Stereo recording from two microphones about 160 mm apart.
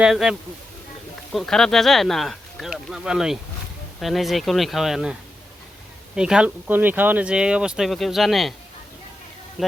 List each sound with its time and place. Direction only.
0.0 s speech: 5° right (ahead or behind)
6.1 s speech: 5° right (ahead or behind)
9.6 s speech: centre (ahead or behind)